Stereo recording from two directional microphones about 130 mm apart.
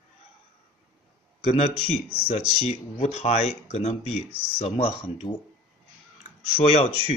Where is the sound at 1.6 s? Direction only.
50° left (ahead or behind).